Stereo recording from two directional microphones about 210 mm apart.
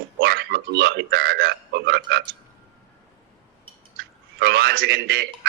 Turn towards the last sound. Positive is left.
turn(degrees=-50)  # may be behind; listen again after turning